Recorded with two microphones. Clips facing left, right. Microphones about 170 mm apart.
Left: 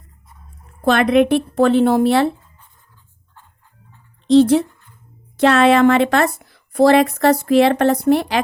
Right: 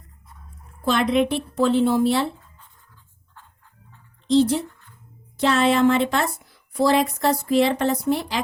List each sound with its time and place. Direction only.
0.9 s a woman's voice: 65° left (ahead or behind)
4.3 s a woman's voice: 65° left (ahead or behind)